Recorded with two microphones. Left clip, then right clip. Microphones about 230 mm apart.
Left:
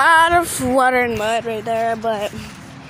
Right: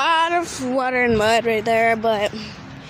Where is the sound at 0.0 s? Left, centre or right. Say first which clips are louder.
Left 6 dB; centre.